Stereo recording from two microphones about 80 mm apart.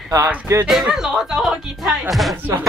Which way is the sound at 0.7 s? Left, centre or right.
Centre.